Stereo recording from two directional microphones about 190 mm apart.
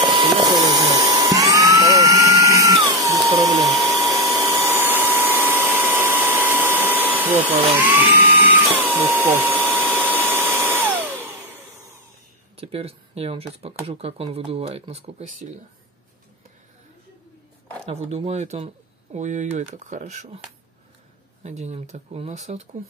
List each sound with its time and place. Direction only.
0.0 s vacuum cleaner: 25° right (ahead or behind); by 11.6 s 10° right (ahead or behind)
12.5 s speech: 30° right (ahead or behind)
17.8 s speech: 30° right (ahead or behind)
21.4 s speech: 35° right (ahead or behind)